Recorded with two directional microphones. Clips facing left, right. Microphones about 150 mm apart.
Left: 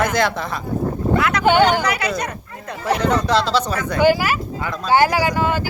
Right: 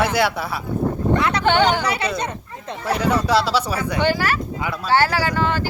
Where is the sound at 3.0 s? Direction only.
10° right (ahead or behind).